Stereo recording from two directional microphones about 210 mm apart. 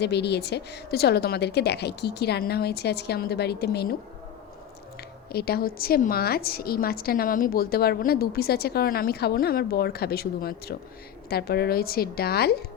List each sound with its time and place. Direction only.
0.0 s a woman's voice: 55° left (ahead or behind)
5.3 s a woman's voice: 45° left (ahead or behind)